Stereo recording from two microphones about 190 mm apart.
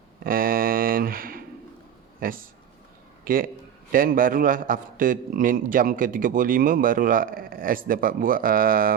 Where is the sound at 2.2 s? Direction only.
50° right (ahead or behind).